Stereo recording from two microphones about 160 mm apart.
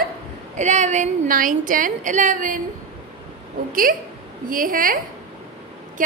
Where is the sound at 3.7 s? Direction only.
60° right (ahead or behind).